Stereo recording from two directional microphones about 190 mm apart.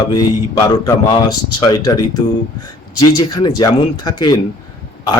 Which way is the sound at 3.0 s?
20° left (ahead or behind).